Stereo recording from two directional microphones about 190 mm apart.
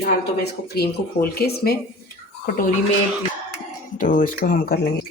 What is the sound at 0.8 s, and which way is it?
Speech, 55° left (ahead or behind).